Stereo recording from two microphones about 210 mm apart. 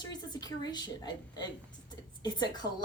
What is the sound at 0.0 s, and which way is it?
A woman's voice, 20° left (ahead or behind).